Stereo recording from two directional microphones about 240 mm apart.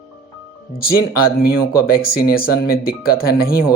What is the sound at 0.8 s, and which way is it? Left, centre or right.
Speech, left.